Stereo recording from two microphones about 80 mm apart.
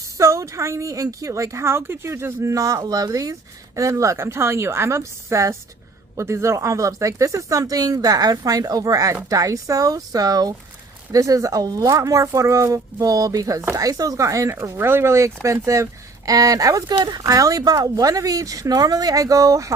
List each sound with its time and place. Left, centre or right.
0.2 s a woman's voice: right
14.8 s a woman's voice: right